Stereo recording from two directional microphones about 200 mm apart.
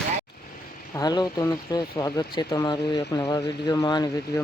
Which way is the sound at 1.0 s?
20° left (ahead or behind).